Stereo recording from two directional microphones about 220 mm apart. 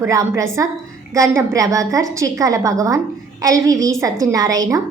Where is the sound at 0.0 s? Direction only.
10° right (ahead or behind).